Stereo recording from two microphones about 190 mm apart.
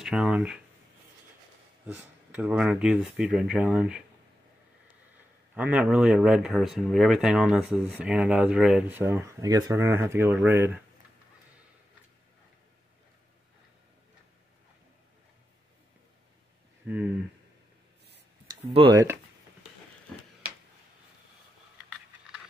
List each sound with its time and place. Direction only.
0.0 s speech: 5° right (ahead or behind)
1.9 s speech: 10° right (ahead or behind)
5.5 s speech: 5° right (ahead or behind)
16.8 s a sound: 10° right (ahead or behind)
18.6 s speech: 30° right (ahead or behind)